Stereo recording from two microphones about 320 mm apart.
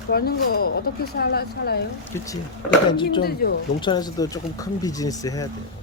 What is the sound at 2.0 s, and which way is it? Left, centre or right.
Speech, centre.